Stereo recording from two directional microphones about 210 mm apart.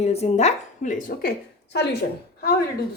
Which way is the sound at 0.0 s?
30° left (ahead or behind).